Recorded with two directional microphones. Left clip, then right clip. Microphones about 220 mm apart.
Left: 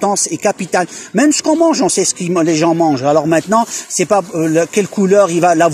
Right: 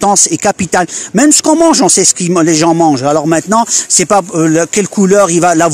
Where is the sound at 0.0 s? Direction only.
40° right (ahead or behind).